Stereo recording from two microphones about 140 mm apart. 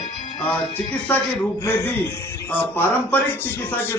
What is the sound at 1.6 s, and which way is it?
A man's voice, 20° left (ahead or behind).